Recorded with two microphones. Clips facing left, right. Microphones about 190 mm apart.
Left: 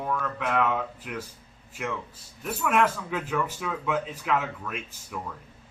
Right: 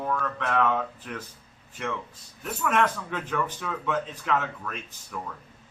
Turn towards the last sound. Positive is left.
turn(degrees=10)  # may be behind; listen again after turning